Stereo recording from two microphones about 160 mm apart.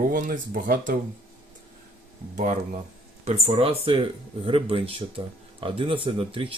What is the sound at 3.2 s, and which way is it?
Speech, 40° right (ahead or behind).